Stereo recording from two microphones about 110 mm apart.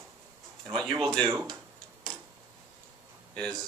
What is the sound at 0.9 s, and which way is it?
Speech, 40° right (ahead or behind).